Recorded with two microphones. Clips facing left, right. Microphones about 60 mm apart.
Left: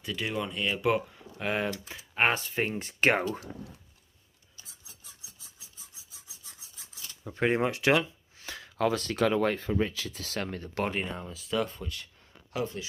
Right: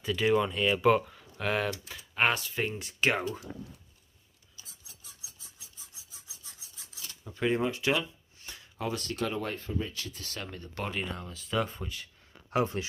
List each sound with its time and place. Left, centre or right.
0.0 s speech: centre
1.9 s speech: left
7.2 s speech: left
8.6 s speech: left
10.8 s speech: left
11.2 s speech: centre
11.5 s speech: centre
12.4 s speech: right